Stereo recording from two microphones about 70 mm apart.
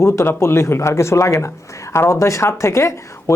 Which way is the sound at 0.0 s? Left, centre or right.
Left.